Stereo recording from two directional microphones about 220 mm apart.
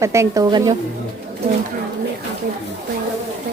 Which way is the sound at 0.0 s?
15° right (ahead or behind).